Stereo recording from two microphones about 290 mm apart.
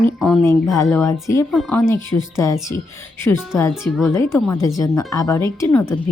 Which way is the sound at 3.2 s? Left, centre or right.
Centre.